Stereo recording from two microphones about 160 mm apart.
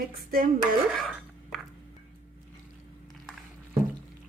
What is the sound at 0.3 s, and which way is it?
Dishes, 65° right (ahead or behind).